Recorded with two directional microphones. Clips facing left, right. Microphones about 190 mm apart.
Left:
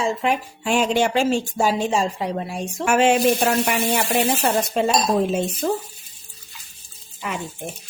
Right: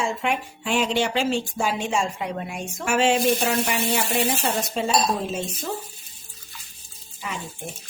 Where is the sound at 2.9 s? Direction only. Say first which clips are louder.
Left 3 dB; 55° left (ahead or behind).